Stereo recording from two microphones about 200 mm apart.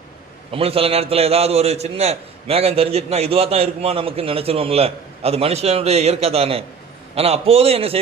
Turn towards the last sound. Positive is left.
turn(degrees=-30)  # may be behind; listen again after turning